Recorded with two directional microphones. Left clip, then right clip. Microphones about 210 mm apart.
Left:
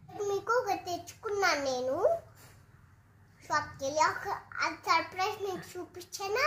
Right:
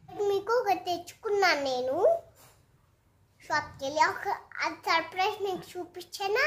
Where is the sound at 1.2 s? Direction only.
10° right (ahead or behind).